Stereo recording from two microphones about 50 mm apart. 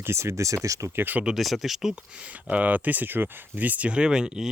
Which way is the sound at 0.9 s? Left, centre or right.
Right.